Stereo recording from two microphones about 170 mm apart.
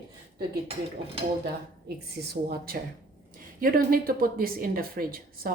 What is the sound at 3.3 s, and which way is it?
A woman's voice, 55° right (ahead or behind).